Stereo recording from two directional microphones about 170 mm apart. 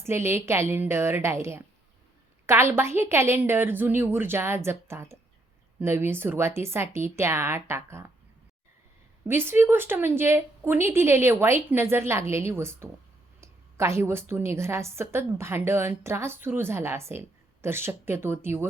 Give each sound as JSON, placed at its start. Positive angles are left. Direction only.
{"t": 0.0, "sound": "a woman's voice", "side_deg": -15}
{"t": 9.2, "sound": "a woman's voice", "side_deg": -15}